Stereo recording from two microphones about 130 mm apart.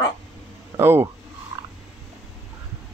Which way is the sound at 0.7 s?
20° right (ahead or behind).